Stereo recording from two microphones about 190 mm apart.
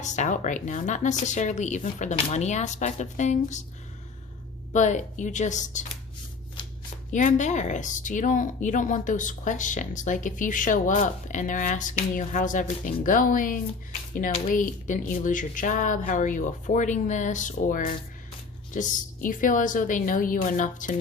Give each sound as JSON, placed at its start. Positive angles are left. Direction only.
{"t": 0.0, "sound": "speech", "side_deg": 40}
{"t": 4.7, "sound": "speech", "side_deg": 40}
{"t": 7.1, "sound": "speech", "side_deg": 40}